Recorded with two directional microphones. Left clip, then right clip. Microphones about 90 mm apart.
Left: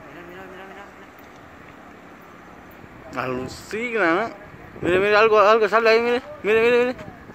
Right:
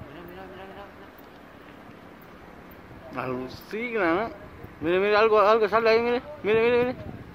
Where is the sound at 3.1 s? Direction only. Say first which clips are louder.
Left 5 dB; 30° left (ahead or behind).